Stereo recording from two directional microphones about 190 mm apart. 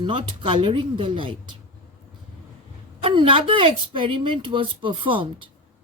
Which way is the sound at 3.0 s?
30° right (ahead or behind).